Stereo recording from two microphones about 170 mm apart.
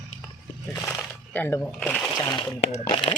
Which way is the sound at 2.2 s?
25° left (ahead or behind).